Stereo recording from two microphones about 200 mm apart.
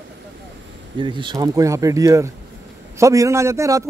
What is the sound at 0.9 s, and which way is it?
A man's voice, 25° right (ahead or behind).